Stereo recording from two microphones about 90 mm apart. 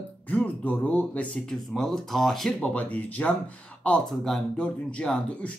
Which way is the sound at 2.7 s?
15° left (ahead or behind).